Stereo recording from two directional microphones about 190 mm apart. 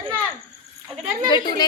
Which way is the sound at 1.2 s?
20° left (ahead or behind).